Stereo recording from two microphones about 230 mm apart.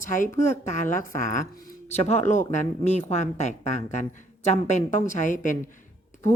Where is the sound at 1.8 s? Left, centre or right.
Left.